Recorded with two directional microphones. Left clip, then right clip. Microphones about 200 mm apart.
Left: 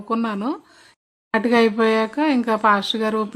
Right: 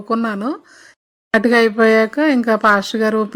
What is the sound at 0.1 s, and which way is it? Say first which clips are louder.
Speech: right 4 dB; 15° right (ahead or behind).